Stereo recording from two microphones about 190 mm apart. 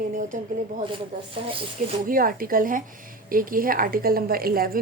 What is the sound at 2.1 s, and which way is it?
A woman's voice, 50° right (ahead or behind).